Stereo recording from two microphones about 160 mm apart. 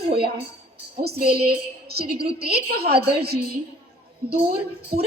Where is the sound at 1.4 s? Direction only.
80° right.